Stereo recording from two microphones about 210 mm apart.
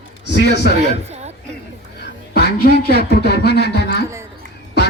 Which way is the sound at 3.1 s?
50° left (ahead or behind).